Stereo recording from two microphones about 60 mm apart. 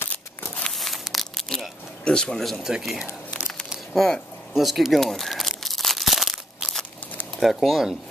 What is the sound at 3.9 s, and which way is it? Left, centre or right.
Speech, centre.